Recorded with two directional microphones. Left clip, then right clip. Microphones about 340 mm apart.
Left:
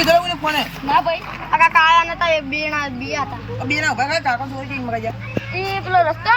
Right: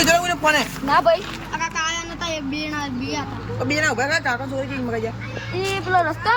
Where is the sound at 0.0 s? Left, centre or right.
Centre.